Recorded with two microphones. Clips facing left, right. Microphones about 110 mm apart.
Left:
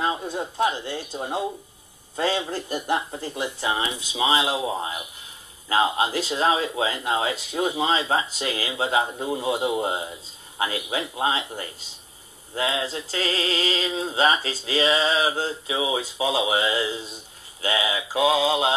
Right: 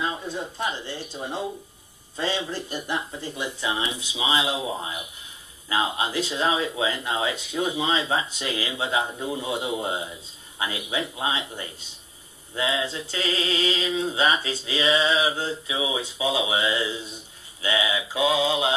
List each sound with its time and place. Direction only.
0.0 s speech: 50° left (ahead or behind)